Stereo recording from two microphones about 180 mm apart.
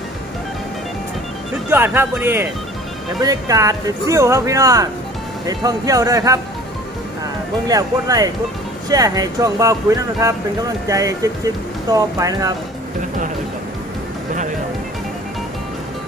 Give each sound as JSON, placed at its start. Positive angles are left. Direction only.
{"t": 1.7, "sound": "speech", "side_deg": -10}
{"t": 7.7, "sound": "speech", "side_deg": -20}